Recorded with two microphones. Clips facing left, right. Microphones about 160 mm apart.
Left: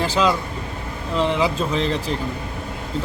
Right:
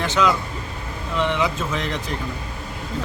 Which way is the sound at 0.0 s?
30° left (ahead or behind).